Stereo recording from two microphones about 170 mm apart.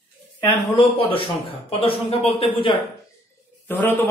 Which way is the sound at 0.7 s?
30° left (ahead or behind).